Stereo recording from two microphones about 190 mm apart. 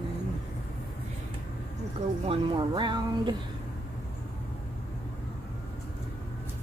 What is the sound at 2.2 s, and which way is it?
Speech, 30° right (ahead or behind).